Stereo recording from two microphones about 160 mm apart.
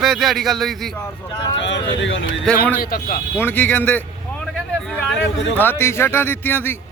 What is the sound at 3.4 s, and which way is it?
Speech, 10° left (ahead or behind).